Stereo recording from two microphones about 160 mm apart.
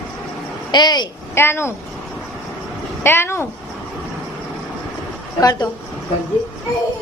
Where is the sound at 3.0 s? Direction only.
15° left (ahead or behind).